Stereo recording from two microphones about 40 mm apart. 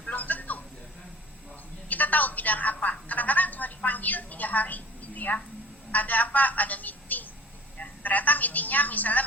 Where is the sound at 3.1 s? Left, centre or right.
Left.